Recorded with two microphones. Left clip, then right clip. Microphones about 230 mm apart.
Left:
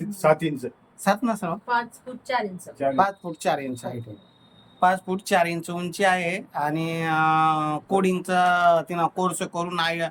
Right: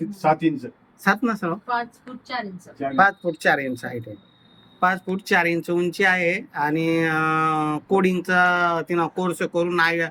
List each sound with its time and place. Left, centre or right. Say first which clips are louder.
0.2 s speech: even; centre
1.0 s speech: right 2 dB; centre
2.9 s speech: right 7 dB; centre